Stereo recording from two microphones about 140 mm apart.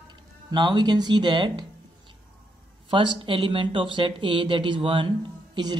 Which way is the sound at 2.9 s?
35° right (ahead or behind).